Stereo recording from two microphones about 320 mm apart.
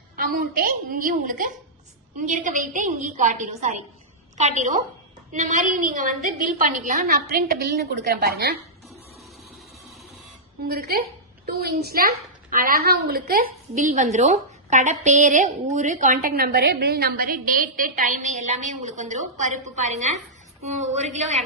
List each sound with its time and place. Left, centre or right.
0.2 s a woman's voice: right
10.6 s a woman's voice: right